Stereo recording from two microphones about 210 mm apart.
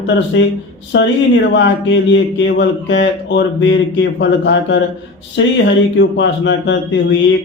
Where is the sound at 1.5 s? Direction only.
60° left (ahead or behind).